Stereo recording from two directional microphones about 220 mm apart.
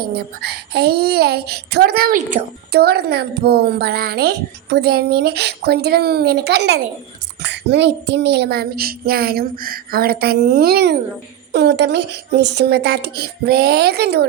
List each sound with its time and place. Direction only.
0.0 s a child's voice: 45° right (ahead or behind)